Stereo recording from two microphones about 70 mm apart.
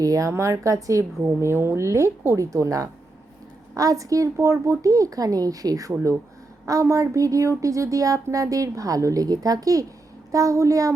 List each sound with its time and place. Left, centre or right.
0.0 s speech: right
1.4 s a woman's voice: right